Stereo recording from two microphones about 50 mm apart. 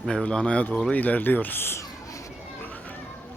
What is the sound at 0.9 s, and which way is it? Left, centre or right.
Speech, left.